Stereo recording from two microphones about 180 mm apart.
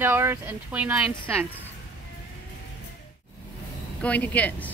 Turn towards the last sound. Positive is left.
turn(degrees=10)  # may be behind; listen again after turning